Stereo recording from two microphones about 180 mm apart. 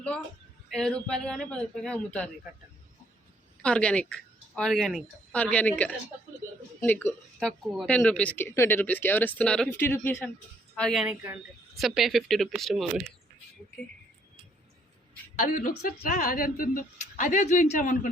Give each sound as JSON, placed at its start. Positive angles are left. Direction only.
{"t": 0.7, "sound": "speech", "side_deg": 5}
{"t": 3.6, "sound": "a woman's voice", "side_deg": 5}
{"t": 11.1, "sound": "speech", "side_deg": -10}
{"t": 15.4, "sound": "a woman's voice", "side_deg": 50}